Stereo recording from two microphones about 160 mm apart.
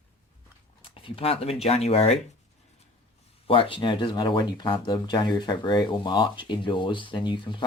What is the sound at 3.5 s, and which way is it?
Speech, 35° left (ahead or behind).